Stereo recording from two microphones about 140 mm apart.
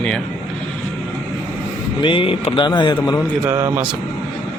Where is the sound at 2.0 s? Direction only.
35° left (ahead or behind).